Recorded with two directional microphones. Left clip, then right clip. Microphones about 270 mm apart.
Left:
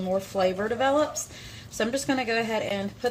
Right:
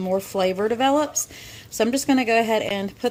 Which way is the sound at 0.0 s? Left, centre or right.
Right.